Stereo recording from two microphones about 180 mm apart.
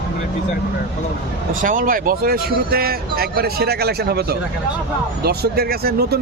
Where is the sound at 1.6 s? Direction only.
50° right (ahead or behind).